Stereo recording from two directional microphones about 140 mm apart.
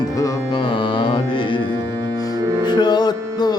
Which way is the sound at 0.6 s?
40° left (ahead or behind).